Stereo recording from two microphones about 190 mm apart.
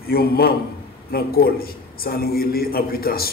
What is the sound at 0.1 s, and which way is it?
A man's voice, 55° left (ahead or behind).